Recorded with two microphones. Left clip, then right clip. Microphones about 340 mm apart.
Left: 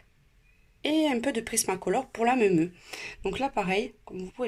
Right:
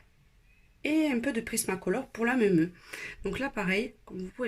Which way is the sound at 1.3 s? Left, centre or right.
Centre.